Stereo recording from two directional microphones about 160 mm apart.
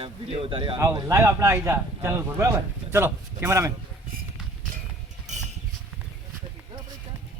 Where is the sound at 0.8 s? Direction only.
20° right (ahead or behind).